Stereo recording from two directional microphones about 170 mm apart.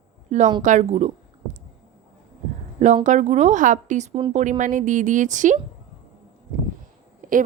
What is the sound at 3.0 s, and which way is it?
Speech, 45° right (ahead or behind).